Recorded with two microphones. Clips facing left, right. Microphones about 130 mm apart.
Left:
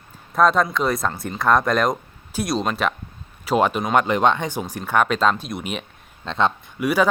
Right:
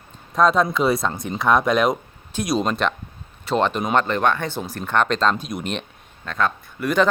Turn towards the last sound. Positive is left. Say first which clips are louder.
# even
turn(degrees=10)  # may be behind; listen again after turning